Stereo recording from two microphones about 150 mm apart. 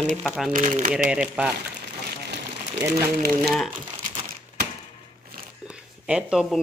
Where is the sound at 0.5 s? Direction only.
60° right (ahead or behind).